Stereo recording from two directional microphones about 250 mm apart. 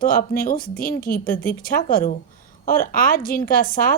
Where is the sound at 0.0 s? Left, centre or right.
Left.